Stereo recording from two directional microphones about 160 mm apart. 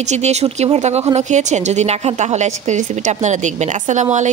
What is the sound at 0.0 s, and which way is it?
A woman's voice, 45° right (ahead or behind).